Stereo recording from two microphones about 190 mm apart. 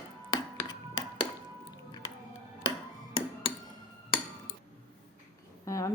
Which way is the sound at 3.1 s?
25° left (ahead or behind).